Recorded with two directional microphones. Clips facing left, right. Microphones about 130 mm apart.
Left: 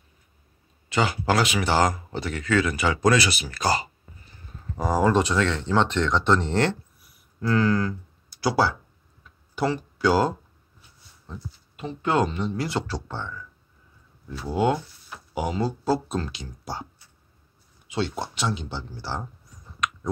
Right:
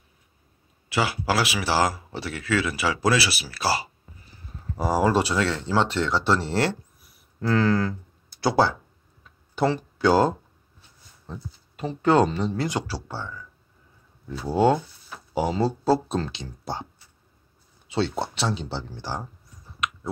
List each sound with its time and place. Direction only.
0.8 s speech: 5° right (ahead or behind)
5.5 s speech: 40° right (ahead or behind)
6.0 s speech: 5° right (ahead or behind)
7.4 s speech: 30° right (ahead or behind)
11.2 s speech: 35° right (ahead or behind)
12.6 s speech: 10° right (ahead or behind)
14.4 s speech: 30° right (ahead or behind)
17.9 s speech: 30° right (ahead or behind)
18.9 s speech: 15° right (ahead or behind)